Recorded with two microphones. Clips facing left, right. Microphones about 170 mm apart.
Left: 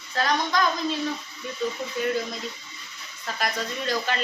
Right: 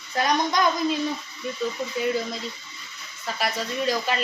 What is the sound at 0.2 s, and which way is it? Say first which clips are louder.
Speech: right 2 dB; 15° right (ahead or behind).